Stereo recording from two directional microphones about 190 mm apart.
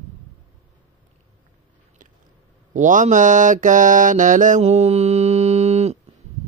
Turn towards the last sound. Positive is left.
turn(degrees=-35)  # may be behind; listen again after turning